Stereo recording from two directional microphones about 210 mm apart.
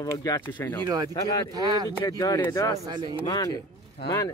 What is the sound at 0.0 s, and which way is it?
Speech, 15° left (ahead or behind).